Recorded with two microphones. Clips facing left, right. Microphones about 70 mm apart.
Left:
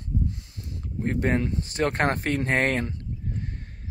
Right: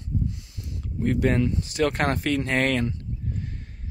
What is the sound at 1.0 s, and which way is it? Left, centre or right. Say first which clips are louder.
Speech: right 3 dB; left.